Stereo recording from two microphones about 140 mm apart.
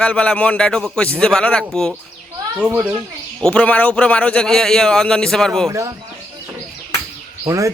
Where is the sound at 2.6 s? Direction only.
10° right (ahead or behind).